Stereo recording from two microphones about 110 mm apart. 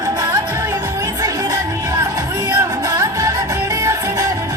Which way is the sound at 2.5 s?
30° right (ahead or behind).